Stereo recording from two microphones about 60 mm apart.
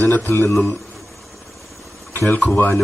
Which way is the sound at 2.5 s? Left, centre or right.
Left.